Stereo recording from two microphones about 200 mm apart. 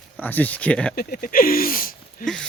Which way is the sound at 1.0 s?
45° left (ahead or behind).